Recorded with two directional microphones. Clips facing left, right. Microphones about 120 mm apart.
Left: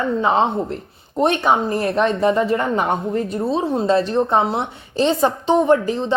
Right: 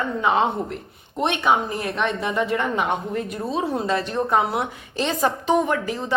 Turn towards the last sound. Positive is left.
turn(degrees=30)  # may be behind; listen again after turning